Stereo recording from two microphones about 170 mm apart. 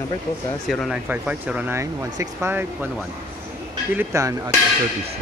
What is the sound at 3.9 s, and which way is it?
Speech, 15° right (ahead or behind).